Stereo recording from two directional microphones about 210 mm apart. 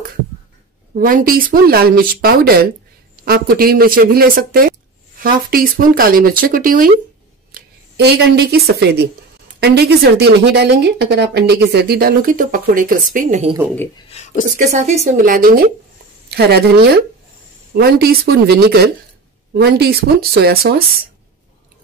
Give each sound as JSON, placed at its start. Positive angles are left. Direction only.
{"t": 0.9, "sound": "a woman's voice", "side_deg": -40}
{"t": 13.9, "sound": "a sound", "side_deg": 30}
{"t": 14.6, "sound": "a woman's voice", "side_deg": -35}